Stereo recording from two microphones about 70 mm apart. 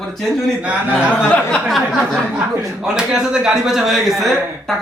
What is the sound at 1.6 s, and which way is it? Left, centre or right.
Speech, centre.